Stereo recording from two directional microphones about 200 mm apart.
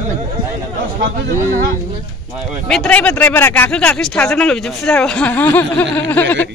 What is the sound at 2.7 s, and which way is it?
Speech, 5° left (ahead or behind).